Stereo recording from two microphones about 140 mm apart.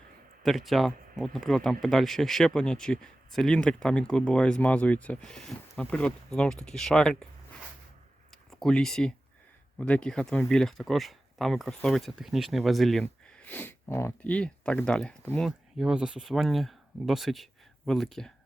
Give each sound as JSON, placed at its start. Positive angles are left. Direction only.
{"t": 0.4, "sound": "speech", "side_deg": 0}
{"t": 8.4, "sound": "speech", "side_deg": 5}
{"t": 15.4, "sound": "speech", "side_deg": -5}